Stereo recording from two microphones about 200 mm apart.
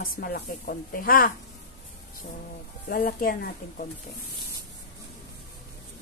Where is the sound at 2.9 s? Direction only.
50° left (ahead or behind).